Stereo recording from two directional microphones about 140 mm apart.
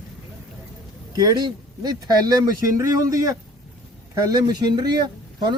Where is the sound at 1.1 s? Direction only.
25° right (ahead or behind).